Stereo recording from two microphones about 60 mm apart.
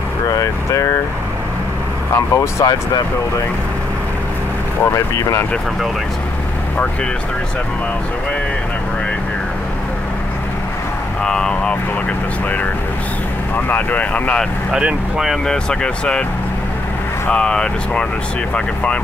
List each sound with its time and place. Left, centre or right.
0.3 s speech: left
2.1 s speech: left
4.8 s speech: left
11.2 s speech: centre
13.7 s speech: left
14.7 s speech: centre
15.4 s speech: centre
17.3 s speech: centre